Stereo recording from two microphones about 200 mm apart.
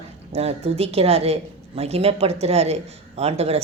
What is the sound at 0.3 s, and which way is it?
Speech, 30° right (ahead or behind).